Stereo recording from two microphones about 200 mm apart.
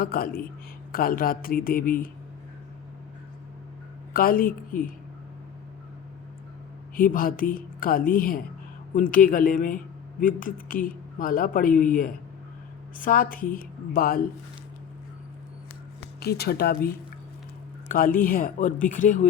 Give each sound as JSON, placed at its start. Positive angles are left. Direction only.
{"t": 0.0, "sound": "speech", "side_deg": 45}
{"t": 4.1, "sound": "speech", "side_deg": 45}
{"t": 6.9, "sound": "speech", "side_deg": 45}
{"t": 16.2, "sound": "speech", "side_deg": 50}